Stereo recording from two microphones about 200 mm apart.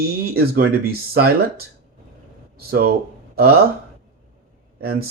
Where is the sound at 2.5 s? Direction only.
50° right (ahead or behind).